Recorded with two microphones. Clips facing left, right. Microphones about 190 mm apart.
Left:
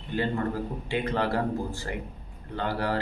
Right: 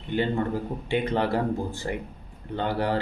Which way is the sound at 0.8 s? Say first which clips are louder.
Right 3 dB; 25° right (ahead or behind).